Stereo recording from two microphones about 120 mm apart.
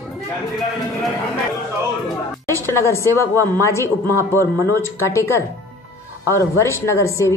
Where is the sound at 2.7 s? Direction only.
20° left (ahead or behind).